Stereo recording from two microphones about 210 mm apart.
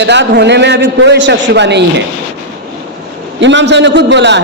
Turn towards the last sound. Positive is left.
turn(degrees=-55)  # may be behind; listen again after turning